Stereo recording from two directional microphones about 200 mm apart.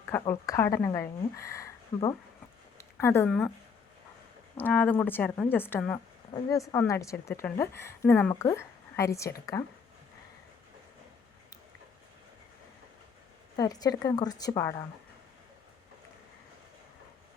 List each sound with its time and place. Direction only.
0.1 s a woman's voice: 15° left (ahead or behind)
4.5 s a woman's voice: 10° left (ahead or behind)
13.6 s a woman's voice: 20° left (ahead or behind)